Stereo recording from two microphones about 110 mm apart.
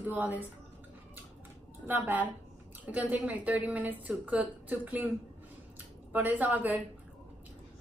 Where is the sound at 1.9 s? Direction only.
15° right (ahead or behind).